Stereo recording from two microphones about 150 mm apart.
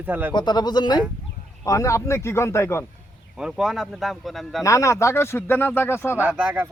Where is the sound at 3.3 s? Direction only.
5° right (ahead or behind).